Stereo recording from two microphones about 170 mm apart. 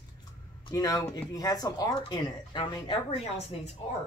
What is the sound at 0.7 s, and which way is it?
Speech, 20° left (ahead or behind).